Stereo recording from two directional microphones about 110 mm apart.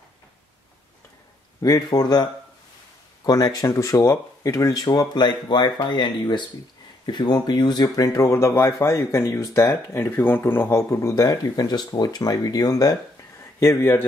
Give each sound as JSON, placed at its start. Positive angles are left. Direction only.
{"t": 1.6, "sound": "speech", "side_deg": 35}
{"t": 3.3, "sound": "speech", "side_deg": 35}
{"t": 13.4, "sound": "speech", "side_deg": 25}